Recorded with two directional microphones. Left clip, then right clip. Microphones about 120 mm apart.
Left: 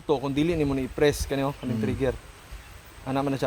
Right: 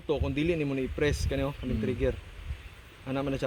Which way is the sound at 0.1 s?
45° left (ahead or behind).